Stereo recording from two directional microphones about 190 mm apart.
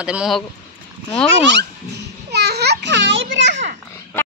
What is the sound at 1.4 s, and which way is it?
Speech, 65° right (ahead or behind).